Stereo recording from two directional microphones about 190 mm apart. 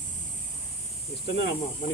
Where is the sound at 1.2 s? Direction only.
70° left (ahead or behind).